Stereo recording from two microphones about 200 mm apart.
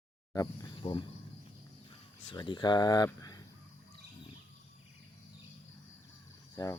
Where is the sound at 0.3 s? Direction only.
25° left (ahead or behind).